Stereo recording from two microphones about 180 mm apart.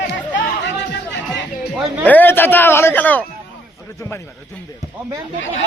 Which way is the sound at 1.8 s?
10° left (ahead or behind).